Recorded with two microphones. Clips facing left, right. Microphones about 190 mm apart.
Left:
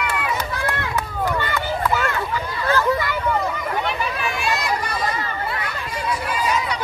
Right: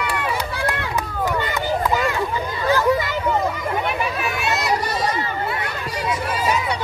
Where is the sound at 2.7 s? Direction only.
15° right (ahead or behind).